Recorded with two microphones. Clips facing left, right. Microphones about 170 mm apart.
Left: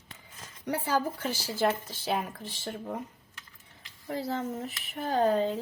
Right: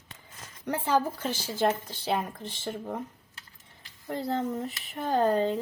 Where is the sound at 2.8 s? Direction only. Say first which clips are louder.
Right 1 dB; 35° right (ahead or behind).